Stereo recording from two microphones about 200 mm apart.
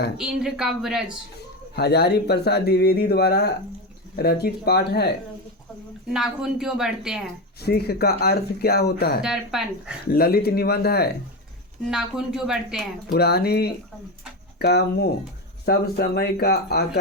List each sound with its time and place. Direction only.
0.2 s speech: 5° right (ahead or behind)
1.7 s speech: 55° left (ahead or behind)
6.1 s speech: centre (ahead or behind)
7.6 s speech: 50° left (ahead or behind)
9.2 s speech: centre (ahead or behind)
10.1 s speech: 50° left (ahead or behind)
11.9 s speech: 5° right (ahead or behind)
13.1 s speech: 55° left (ahead or behind)